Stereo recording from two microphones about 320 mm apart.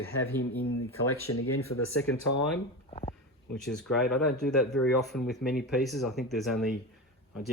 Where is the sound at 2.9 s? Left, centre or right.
Centre.